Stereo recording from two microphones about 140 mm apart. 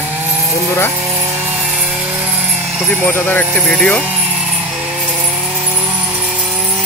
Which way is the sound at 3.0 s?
15° left (ahead or behind).